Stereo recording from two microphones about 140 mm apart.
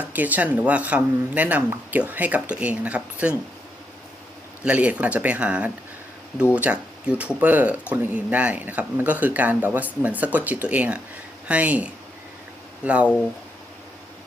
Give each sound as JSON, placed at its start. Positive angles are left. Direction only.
{"t": 0.0, "sound": "speech", "side_deg": -10}
{"t": 4.6, "sound": "speech", "side_deg": -10}